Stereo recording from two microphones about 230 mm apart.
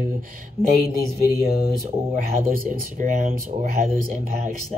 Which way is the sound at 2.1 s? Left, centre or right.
Right.